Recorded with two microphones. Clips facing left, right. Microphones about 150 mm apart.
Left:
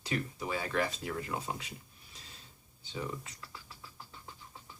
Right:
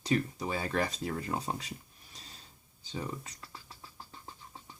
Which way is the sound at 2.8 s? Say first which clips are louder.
Right 1 dB; 40° right (ahead or behind).